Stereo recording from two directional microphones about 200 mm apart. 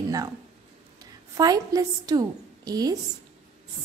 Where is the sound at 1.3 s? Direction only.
20° right (ahead or behind).